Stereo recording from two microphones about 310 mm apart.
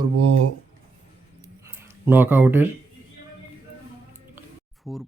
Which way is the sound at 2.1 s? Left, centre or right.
Centre.